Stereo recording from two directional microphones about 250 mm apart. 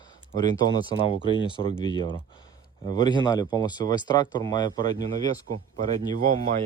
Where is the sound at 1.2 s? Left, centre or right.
Centre.